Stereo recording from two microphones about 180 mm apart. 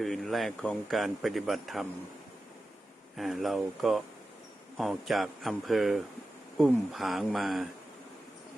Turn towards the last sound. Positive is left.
turn(degrees=0)  # may be behind; listen again after turning